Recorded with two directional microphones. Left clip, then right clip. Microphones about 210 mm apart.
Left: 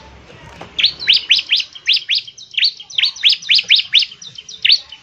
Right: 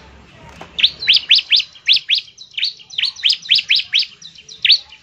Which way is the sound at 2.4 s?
15° left (ahead or behind).